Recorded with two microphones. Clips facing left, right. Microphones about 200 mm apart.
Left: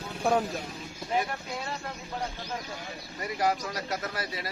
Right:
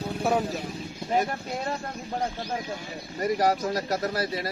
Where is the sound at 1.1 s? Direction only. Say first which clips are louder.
Right 4 dB; 45° right (ahead or behind).